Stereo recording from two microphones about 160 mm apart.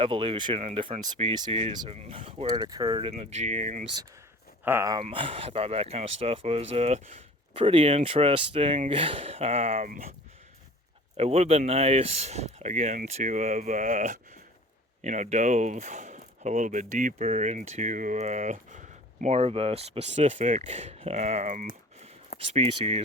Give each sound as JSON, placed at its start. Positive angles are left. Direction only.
{"t": 0.0, "sound": "speech", "side_deg": -35}
{"t": 2.6, "sound": "speech", "side_deg": -25}
{"t": 4.6, "sound": "speech", "side_deg": -15}
{"t": 5.0, "sound": "speech", "side_deg": -35}
{"t": 11.2, "sound": "speech", "side_deg": -40}
{"t": 22.4, "sound": "speech", "side_deg": -35}